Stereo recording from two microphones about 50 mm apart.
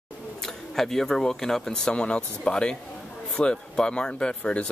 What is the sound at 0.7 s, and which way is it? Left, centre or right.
Speech, centre.